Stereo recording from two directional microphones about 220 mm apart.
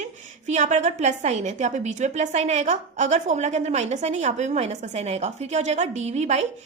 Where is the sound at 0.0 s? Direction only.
30° right (ahead or behind).